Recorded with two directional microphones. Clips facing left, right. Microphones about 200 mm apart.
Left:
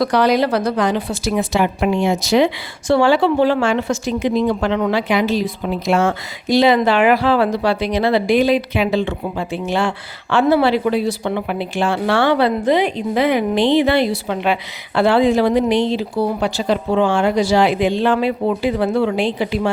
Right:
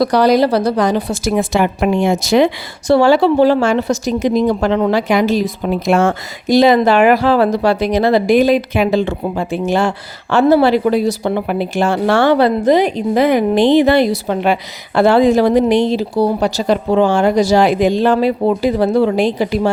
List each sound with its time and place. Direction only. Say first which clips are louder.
0.0 s a woman's voice: right 4 dB; 35° right (ahead or behind)